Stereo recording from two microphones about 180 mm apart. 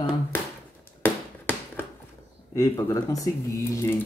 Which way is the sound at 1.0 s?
10° left (ahead or behind).